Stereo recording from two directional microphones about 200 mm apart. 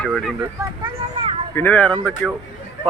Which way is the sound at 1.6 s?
5° left (ahead or behind).